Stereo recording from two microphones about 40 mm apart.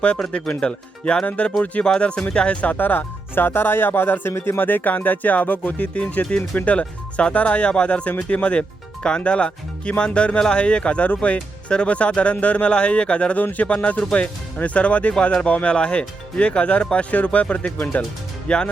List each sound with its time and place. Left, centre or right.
0.0 s speech: left
2.7 s speech: left
3.3 s speech: left
5.8 s speech: left
13.3 s speech: left
14.0 s speech: left
14.6 s speech: left
18.4 s speech: left